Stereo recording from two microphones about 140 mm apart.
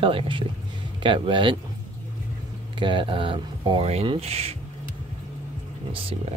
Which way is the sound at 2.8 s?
35° right (ahead or behind).